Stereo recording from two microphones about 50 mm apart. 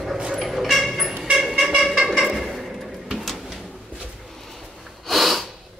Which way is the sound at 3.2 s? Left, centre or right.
Centre.